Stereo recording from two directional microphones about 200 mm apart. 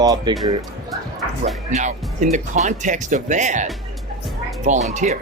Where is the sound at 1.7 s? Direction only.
35° right (ahead or behind).